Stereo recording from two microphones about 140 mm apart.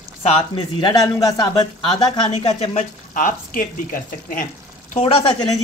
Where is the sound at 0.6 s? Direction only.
35° left (ahead or behind).